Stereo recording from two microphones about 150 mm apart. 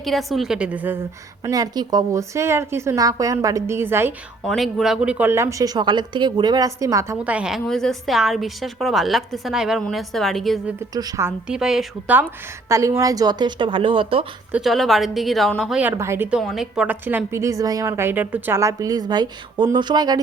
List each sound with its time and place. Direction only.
0.0 s a woman's voice: centre (ahead or behind)
1.5 s a woman's voice: 25° right (ahead or behind)
4.4 s a woman's voice: centre (ahead or behind); by 7.2 s 20° right (ahead or behind)
7.3 s a woman's voice: 5° right (ahead or behind)
10.9 s a woman's voice: 20° right (ahead or behind)
11.4 s a woman's voice: 5° right (ahead or behind)
12.6 s a woman's voice: 20° right (ahead or behind); by 14.3 s 35° right (ahead or behind)
14.5 s a woman's voice: centre (ahead or behind)
16.4 s a woman's voice: centre (ahead or behind); by 20.1 s 30° right (ahead or behind)